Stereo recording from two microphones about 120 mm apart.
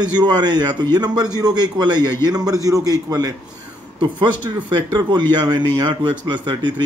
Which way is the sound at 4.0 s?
40° right (ahead or behind).